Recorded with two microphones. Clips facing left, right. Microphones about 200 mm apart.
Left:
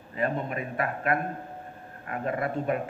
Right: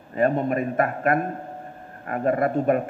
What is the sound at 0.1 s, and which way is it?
Speech, 50° right (ahead or behind).